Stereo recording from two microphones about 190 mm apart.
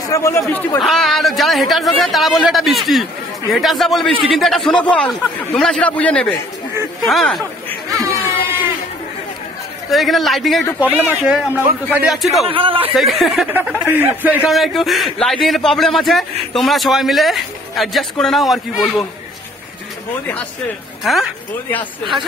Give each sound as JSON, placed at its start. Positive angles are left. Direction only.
{"t": 0.1, "sound": "a man's voice", "side_deg": 15}
{"t": 6.7, "sound": "speech", "side_deg": -15}
{"t": 7.1, "sound": "a man's voice", "side_deg": 0}
{"t": 9.8, "sound": "a man's voice", "side_deg": 0}
{"t": 12.4, "sound": "a man's voice", "side_deg": -30}
{"t": 12.9, "sound": "a man's voice", "side_deg": 0}
{"t": 21.0, "sound": "speech", "side_deg": 0}